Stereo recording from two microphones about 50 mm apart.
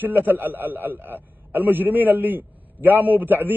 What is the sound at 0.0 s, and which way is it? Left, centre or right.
A man's voice, right.